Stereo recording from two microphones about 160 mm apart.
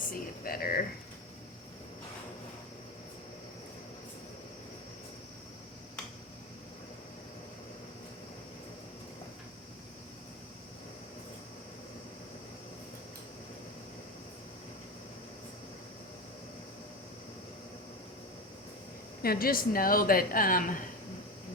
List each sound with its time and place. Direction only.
0.1 s speech: 65° left (ahead or behind)
19.2 s speech: 70° left (ahead or behind)